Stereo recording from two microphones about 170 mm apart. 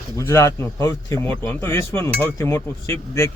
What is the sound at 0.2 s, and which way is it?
Speech, 15° left (ahead or behind).